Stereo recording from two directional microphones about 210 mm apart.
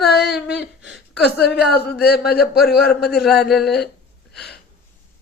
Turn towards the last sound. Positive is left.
turn(degrees=0)  # may be behind; listen again after turning